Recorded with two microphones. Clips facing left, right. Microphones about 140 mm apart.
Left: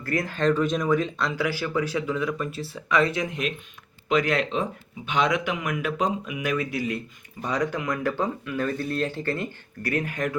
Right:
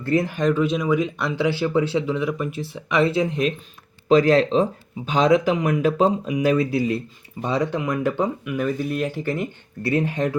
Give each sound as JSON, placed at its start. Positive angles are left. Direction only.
{"t": 0.0, "sound": "speech", "side_deg": -25}
{"t": 1.4, "sound": "speech", "side_deg": -25}